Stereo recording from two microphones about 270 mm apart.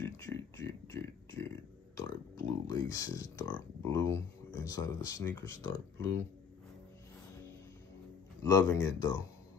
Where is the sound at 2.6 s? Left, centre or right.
Centre.